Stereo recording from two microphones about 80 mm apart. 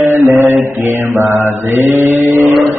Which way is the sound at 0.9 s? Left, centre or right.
Right.